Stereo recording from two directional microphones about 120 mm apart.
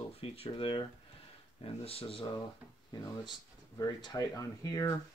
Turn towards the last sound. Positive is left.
turn(degrees=30)  # may be behind; listen again after turning